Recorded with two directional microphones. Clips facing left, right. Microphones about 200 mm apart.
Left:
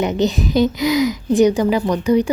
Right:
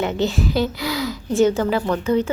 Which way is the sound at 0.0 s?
20° left (ahead or behind).